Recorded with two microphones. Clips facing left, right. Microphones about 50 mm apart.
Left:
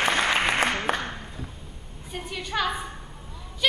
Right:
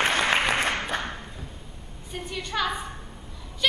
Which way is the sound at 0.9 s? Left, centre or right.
Centre.